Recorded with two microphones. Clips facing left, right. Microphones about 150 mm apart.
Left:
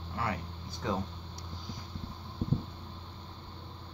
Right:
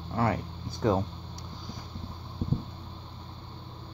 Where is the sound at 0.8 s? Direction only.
45° right (ahead or behind).